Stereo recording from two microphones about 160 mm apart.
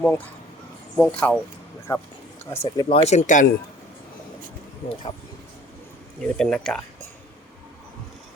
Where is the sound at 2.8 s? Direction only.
40° left (ahead or behind).